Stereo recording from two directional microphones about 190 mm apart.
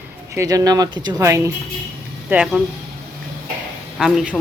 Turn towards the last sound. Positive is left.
turn(degrees=0)  # may be behind; listen again after turning